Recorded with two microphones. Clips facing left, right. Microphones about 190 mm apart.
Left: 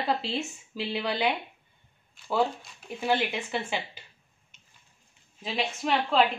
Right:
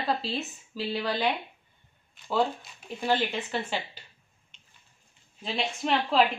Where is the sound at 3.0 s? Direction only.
10° left (ahead or behind).